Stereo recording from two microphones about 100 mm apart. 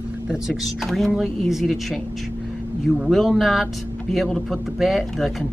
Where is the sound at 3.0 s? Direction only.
Centre (ahead or behind).